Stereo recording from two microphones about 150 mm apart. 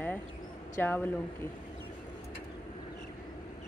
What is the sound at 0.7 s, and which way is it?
Speech, 15° left (ahead or behind).